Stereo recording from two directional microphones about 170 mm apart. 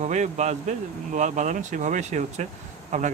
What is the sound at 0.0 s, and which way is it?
Speech, 45° right (ahead or behind).